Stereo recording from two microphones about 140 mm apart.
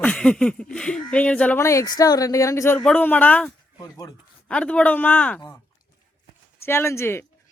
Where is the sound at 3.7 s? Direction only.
25° left (ahead or behind).